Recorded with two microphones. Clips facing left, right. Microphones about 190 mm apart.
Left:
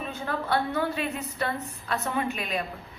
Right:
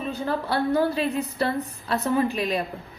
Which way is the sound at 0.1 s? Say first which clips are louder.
Right 2 dB; 35° right (ahead or behind).